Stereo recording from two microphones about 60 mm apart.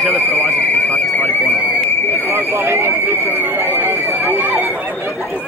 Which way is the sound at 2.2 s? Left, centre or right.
Right.